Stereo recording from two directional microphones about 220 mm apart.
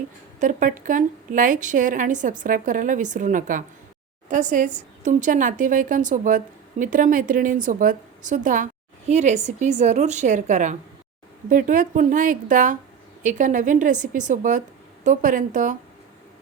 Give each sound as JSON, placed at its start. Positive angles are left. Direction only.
{"t": 0.3, "sound": "a woman's voice", "side_deg": -35}